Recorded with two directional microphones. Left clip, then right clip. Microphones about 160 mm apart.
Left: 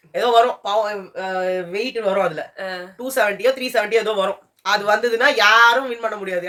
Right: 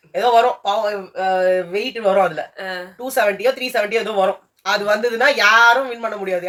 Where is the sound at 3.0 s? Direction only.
25° left (ahead or behind).